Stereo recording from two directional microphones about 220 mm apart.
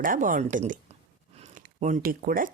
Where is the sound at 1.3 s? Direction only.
30° right (ahead or behind).